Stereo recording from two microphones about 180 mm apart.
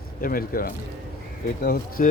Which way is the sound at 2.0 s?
50° left (ahead or behind).